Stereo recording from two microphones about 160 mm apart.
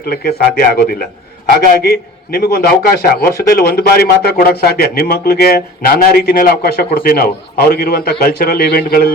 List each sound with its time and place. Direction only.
0.0 s a man's voice: 75° left (ahead or behind)